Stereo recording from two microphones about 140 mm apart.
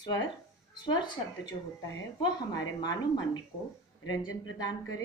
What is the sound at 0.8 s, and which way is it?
Speech, 35° left (ahead or behind).